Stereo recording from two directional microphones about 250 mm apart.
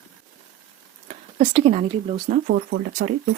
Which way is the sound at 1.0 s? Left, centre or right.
Right.